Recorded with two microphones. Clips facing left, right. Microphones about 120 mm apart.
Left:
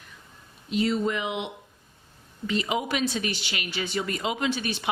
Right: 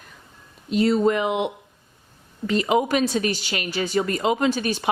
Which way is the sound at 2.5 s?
45° right (ahead or behind).